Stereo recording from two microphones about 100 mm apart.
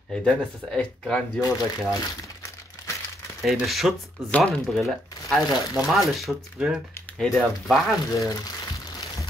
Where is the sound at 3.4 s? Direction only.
Centre (ahead or behind).